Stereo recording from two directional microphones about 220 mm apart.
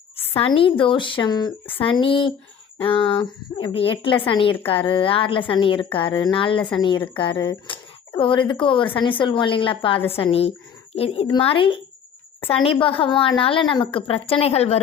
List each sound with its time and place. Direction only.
0.2 s speech: 25° left (ahead or behind)
12.8 s speech: 25° left (ahead or behind)